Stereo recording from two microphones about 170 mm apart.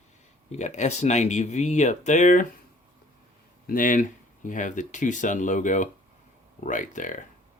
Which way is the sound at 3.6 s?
55° left (ahead or behind).